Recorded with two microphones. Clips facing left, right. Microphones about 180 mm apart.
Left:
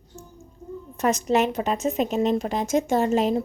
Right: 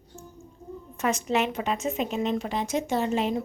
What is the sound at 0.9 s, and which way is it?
A woman's voice, 40° left (ahead or behind).